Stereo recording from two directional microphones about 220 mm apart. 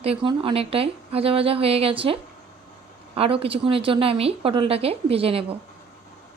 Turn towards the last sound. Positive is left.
turn(degrees=-25)  # may be behind; listen again after turning